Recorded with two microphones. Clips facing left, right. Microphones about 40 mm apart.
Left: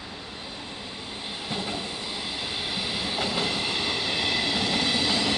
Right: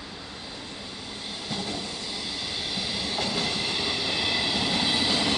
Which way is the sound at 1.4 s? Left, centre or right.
Left.